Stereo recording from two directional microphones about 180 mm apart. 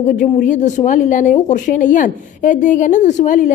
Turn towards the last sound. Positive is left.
turn(degrees=45)  # may be behind; listen again after turning